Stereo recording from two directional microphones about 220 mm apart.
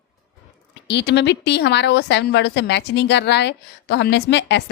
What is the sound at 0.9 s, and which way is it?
A woman's voice, 50° left (ahead or behind).